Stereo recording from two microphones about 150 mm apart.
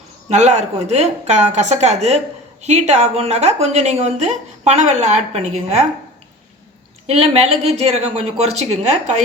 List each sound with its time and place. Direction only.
0.3 s speech: 50° right (ahead or behind)
7.2 s speech: 45° right (ahead or behind)